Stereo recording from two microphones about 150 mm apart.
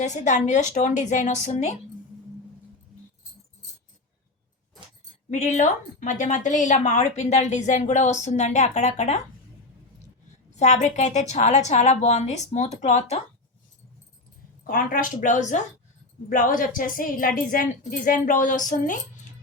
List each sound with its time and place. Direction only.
0.0 s a woman's voice: 55° left (ahead or behind)
5.3 s a woman's voice: 50° left (ahead or behind)
10.5 s a woman's voice: 50° left (ahead or behind)
14.7 s a woman's voice: 65° left (ahead or behind)
16.3 s a woman's voice: 65° left (ahead or behind)